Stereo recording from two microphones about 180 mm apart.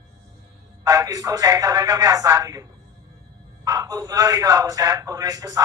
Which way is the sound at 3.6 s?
20° right (ahead or behind).